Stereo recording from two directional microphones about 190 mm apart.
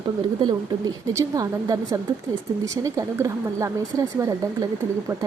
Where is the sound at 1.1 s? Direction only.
20° right (ahead or behind).